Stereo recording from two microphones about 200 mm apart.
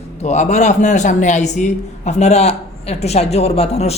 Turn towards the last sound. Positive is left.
turn(degrees=30)  # may be behind; listen again after turning